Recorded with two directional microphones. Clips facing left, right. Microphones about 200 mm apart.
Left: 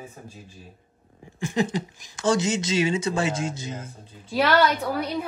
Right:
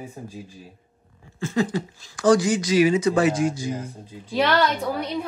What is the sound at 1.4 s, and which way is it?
Speech, 20° left (ahead or behind).